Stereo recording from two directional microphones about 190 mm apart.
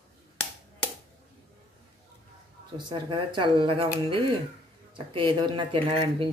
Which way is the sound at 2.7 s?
25° right (ahead or behind).